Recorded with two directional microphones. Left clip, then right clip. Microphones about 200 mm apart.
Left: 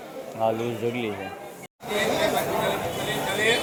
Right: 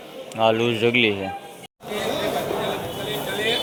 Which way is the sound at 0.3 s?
10° right (ahead or behind).